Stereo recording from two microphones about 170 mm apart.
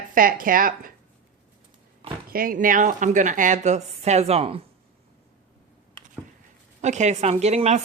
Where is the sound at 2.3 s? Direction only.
60° right (ahead or behind); by 4.6 s 35° right (ahead or behind).